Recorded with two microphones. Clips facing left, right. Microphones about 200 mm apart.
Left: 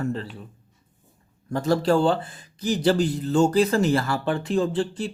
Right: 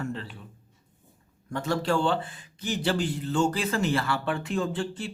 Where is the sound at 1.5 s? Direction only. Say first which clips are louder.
Left 6 dB; 35° left (ahead or behind).